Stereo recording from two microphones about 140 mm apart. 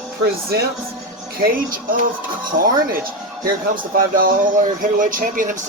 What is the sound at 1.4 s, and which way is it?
Speech, 90° right.